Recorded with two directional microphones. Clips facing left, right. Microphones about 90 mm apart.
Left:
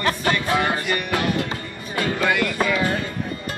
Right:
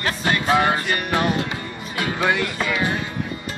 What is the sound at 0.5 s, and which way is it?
Speech, 25° right (ahead or behind).